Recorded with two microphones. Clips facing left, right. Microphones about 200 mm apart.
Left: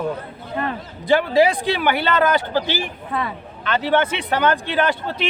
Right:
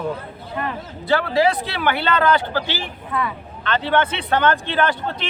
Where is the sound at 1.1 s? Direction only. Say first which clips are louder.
Left 2 dB; 15° left (ahead or behind).